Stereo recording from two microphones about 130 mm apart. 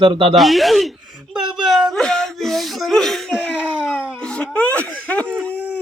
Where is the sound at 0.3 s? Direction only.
Centre (ahead or behind).